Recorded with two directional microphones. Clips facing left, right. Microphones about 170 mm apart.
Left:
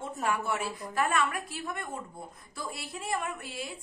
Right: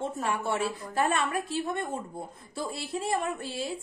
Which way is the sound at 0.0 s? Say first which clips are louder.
Right 1 dB; 30° right (ahead or behind).